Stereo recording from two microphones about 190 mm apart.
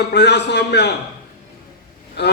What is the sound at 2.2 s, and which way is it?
Speech, 60° left (ahead or behind).